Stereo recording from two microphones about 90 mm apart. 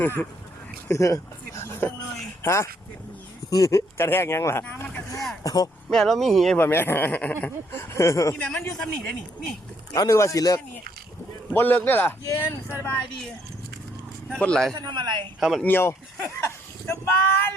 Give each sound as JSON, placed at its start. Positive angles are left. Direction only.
{"t": 0.9, "sound": "speech", "side_deg": 35}
{"t": 5.4, "sound": "speech", "side_deg": 40}
{"t": 5.9, "sound": "speech", "side_deg": 5}
{"t": 6.6, "sound": "speech", "side_deg": 25}
{"t": 8.4, "sound": "speech", "side_deg": 15}
{"t": 9.9, "sound": "speech", "side_deg": 35}
{"t": 11.5, "sound": "speech", "side_deg": 20}
{"t": 14.3, "sound": "speech", "side_deg": 10}
{"t": 14.8, "sound": "speech", "side_deg": -55}
{"t": 15.4, "sound": "speech", "side_deg": -5}
{"t": 15.6, "sound": "speech", "side_deg": 25}